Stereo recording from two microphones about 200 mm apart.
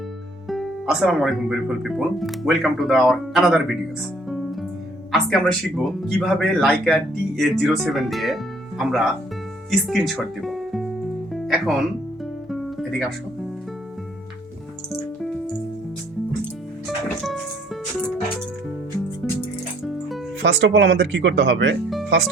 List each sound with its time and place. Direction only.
0.4 s speech: centre (ahead or behind)
5.1 s speech: centre (ahead or behind)
11.3 s music: centre (ahead or behind)
12.5 s guitar: centre (ahead or behind)
20.4 s speech: 60° right (ahead or behind)